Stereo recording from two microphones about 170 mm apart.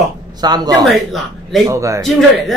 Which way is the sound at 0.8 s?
Centre (ahead or behind).